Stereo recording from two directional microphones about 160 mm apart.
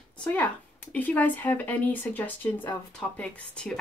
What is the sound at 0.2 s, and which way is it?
Speech, 10° left (ahead or behind).